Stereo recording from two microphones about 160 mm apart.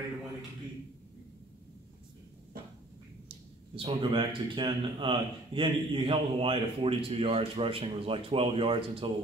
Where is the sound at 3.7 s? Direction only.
30° right (ahead or behind).